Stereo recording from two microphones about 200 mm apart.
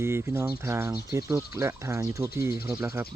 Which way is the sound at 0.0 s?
10° right (ahead or behind).